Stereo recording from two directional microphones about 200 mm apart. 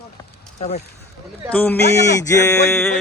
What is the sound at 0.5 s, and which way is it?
Speech, 35° left (ahead or behind).